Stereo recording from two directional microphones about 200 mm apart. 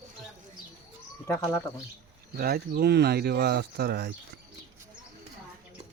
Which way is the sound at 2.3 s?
50° right (ahead or behind).